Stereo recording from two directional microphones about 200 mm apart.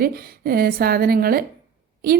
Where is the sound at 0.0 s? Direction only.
50° right (ahead or behind).